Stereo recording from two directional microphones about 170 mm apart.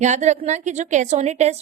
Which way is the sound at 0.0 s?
45° right (ahead or behind).